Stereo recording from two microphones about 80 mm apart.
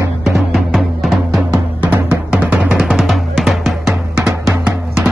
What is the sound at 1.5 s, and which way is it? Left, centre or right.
Music, right.